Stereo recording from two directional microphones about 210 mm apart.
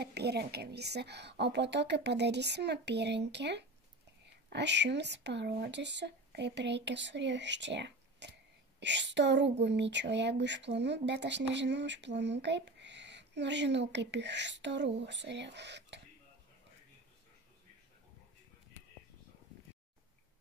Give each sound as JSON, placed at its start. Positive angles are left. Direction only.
{"t": 0.0, "sound": "a woman's voice", "side_deg": -50}